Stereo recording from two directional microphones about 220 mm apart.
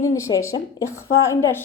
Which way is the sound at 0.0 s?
15° left (ahead or behind).